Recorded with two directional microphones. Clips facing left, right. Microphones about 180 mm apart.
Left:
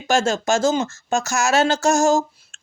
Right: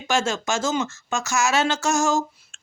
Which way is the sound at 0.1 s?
35° left (ahead or behind).